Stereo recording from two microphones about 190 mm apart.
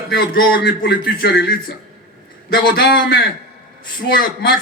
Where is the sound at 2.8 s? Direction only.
60° left (ahead or behind).